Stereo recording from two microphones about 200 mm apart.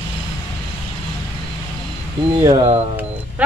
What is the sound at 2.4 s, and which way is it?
Speech, 25° right (ahead or behind).